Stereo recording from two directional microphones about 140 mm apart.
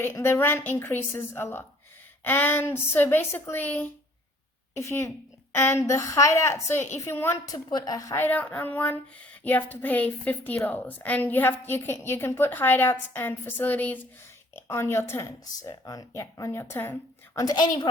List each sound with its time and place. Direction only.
0.0 s a woman's voice: 20° left (ahead or behind)
8.1 s a woman's voice: 15° left (ahead or behind); by 17.8 s 30° left (ahead or behind)